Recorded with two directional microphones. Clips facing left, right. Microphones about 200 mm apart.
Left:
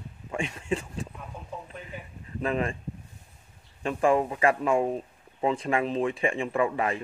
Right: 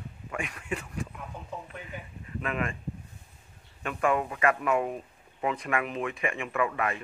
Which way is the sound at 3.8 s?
30° left (ahead or behind).